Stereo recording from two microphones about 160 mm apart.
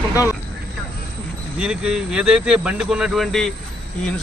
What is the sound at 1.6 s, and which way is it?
Speech, 5° right (ahead or behind).